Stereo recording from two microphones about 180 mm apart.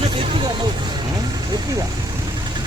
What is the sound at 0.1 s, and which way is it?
Vehicle, 30° right (ahead or behind).